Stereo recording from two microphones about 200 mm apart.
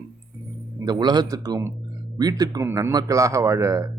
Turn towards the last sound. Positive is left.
turn(degrees=-15)  # may be behind; listen again after turning